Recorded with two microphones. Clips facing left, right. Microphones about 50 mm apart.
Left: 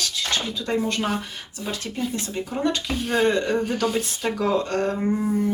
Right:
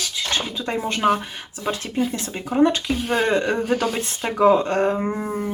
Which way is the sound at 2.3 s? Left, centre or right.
Right.